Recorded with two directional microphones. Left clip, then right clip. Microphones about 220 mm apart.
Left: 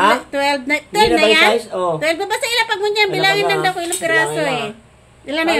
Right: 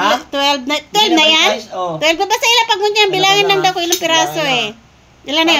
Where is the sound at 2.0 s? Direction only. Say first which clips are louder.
Right 6 dB; 15° right (ahead or behind).